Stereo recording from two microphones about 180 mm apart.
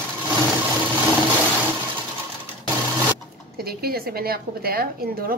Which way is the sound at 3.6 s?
60° right (ahead or behind).